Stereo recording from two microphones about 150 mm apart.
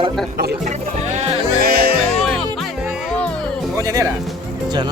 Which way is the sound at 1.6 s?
90° right.